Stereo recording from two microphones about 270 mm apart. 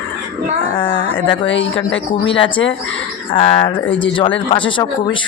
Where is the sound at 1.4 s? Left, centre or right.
Left.